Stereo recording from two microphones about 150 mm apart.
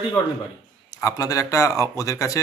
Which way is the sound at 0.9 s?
25° left (ahead or behind).